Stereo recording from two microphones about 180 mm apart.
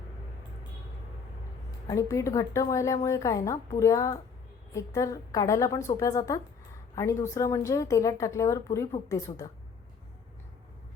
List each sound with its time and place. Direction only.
1.9 s a woman's voice: 15° left (ahead or behind)